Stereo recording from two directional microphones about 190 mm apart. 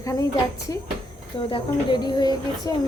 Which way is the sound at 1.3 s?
25° left (ahead or behind).